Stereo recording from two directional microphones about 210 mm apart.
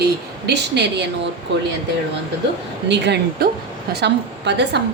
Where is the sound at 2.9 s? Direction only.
55° right (ahead or behind).